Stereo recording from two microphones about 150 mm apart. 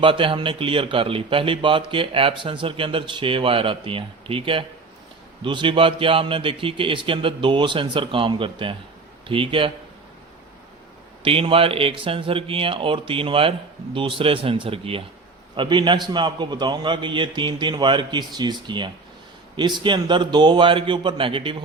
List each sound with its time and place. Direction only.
0.0 s a man's voice: 35° right (ahead or behind)
11.2 s a man's voice: 40° right (ahead or behind)